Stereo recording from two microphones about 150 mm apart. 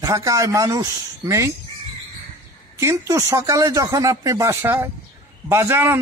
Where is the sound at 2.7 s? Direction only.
20° right (ahead or behind).